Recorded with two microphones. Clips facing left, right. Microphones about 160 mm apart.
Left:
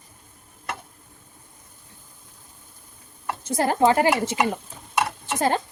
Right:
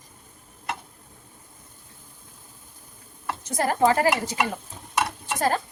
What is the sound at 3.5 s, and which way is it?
Speech, 25° left (ahead or behind).